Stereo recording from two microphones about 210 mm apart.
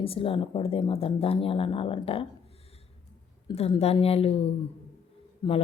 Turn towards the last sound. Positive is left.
turn(degrees=20)  # may be behind; listen again after turning